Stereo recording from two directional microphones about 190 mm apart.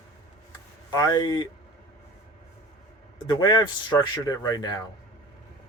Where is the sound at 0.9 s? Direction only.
20° left (ahead or behind).